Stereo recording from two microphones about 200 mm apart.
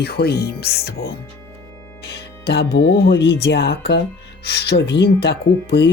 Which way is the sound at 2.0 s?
55° left (ahead or behind).